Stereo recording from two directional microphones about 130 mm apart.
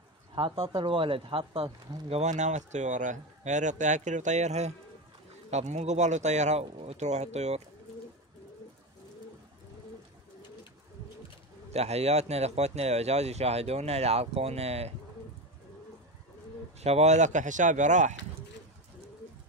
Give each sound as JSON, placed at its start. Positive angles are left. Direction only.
{"t": 0.3, "sound": "speech", "side_deg": -40}
{"t": 2.0, "sound": "speech", "side_deg": -60}
{"t": 6.6, "sound": "speech", "side_deg": -50}
{"t": 11.7, "sound": "speech", "side_deg": -55}
{"t": 16.8, "sound": "speech", "side_deg": -55}